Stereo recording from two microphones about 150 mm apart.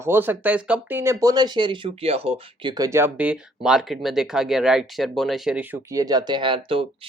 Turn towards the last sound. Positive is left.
turn(degrees=-35)  # may be behind; listen again after turning